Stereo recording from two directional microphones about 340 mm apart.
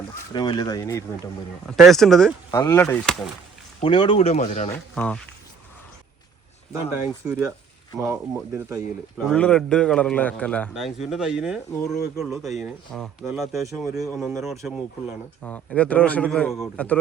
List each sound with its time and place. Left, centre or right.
0.3 s speech: centre
3.8 s speech: centre
4.7 s a man's voice: centre
7.3 s a man's voice: centre